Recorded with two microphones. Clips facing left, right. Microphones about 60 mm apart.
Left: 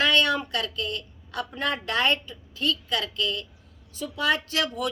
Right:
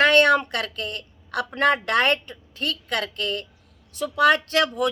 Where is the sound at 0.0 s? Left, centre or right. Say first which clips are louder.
Right 6 dB; right.